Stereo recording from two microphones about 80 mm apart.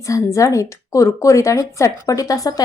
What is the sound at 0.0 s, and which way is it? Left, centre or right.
A woman's voice, left.